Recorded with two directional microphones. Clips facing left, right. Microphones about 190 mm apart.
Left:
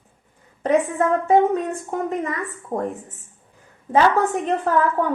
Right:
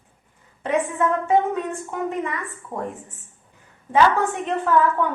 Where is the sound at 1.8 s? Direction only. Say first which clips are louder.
Left 2 dB; 40° left (ahead or behind).